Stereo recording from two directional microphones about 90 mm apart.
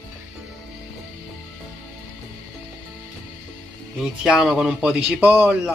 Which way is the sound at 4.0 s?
5° right (ahead or behind).